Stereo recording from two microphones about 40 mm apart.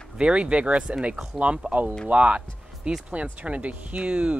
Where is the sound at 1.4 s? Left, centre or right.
Right.